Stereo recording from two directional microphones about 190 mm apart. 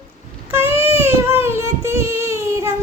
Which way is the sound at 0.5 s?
10° right (ahead or behind).